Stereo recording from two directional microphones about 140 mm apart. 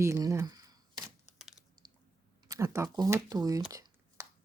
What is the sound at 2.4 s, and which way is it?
Speech, 25° right (ahead or behind).